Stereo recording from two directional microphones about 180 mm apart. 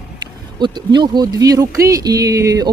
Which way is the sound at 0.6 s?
25° right (ahead or behind).